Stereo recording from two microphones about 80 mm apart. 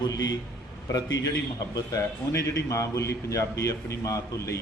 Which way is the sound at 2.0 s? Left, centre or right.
Left.